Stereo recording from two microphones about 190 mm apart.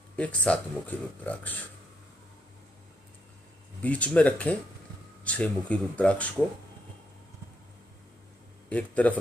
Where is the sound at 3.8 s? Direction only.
10° left (ahead or behind).